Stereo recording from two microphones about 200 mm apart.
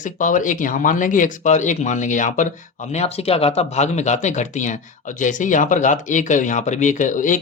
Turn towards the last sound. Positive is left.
turn(degrees=40)  # may be behind; listen again after turning